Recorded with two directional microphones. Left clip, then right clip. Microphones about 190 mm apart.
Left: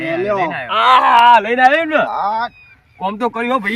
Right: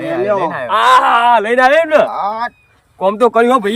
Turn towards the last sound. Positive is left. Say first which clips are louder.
# right 7 dB
turn(degrees=-20)  # may be behind; listen again after turning